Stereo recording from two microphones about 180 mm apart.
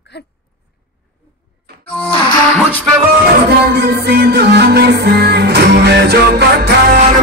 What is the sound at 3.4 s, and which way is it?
Music, 60° right (ahead or behind).